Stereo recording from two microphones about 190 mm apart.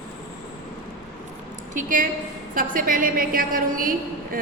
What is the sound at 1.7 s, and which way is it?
A woman's voice, 45° right (ahead or behind).